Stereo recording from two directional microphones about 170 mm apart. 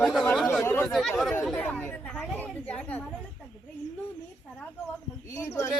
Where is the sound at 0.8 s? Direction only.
Centre (ahead or behind).